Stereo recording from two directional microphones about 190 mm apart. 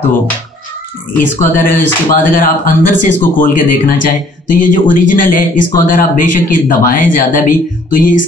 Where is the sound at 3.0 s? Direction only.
45° left (ahead or behind).